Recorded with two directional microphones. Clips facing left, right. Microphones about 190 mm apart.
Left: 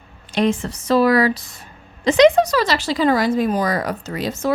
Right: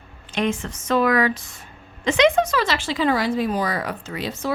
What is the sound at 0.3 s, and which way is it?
Speech, 35° left (ahead or behind).